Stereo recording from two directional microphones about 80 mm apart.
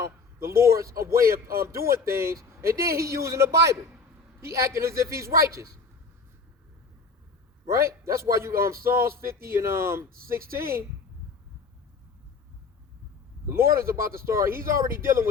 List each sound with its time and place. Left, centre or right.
0.0 s a man's voice: right
7.7 s a man's voice: right
13.5 s a man's voice: right